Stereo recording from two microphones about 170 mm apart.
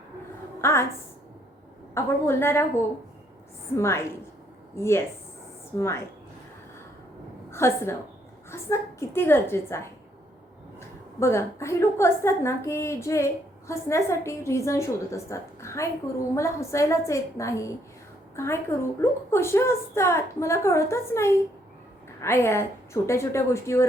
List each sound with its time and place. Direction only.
0.6 s a woman's voice: 15° left (ahead or behind)
2.0 s a woman's voice: 15° left (ahead or behind)
7.5 s a woman's voice: 15° left (ahead or behind)